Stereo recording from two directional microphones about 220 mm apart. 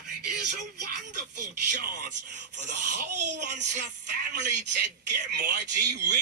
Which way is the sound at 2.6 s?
50° right (ahead or behind).